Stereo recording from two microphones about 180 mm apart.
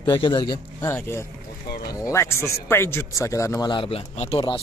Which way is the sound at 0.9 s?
15° left (ahead or behind).